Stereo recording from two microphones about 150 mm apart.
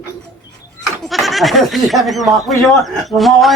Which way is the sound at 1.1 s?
Centre (ahead or behind).